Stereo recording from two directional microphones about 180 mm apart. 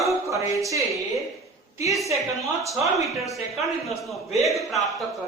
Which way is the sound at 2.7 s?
15° right (ahead or behind).